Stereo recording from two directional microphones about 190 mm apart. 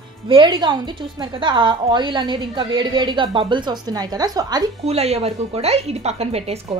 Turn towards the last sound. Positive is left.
turn(degrees=-35)  # may be behind; listen again after turning